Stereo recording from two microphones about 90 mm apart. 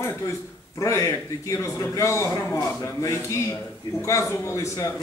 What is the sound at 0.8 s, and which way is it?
Speech, 35° left (ahead or behind).